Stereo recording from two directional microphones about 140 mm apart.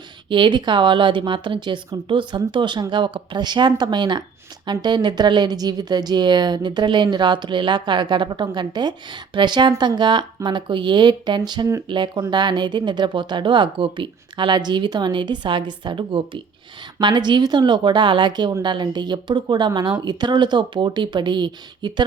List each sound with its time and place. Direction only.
0.3 s a woman's voice: 35° right (ahead or behind)